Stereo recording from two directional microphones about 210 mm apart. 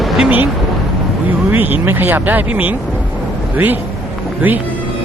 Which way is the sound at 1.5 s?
10° right (ahead or behind).